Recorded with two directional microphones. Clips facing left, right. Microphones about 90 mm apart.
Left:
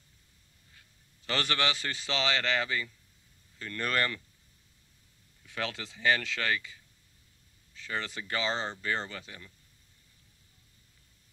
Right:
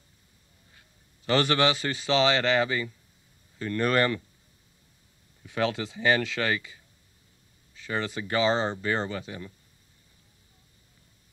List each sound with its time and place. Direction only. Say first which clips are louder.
0.7 s speech: even; 20° right (ahead or behind)
5.4 s speech: right 9 dB; 20° right (ahead or behind)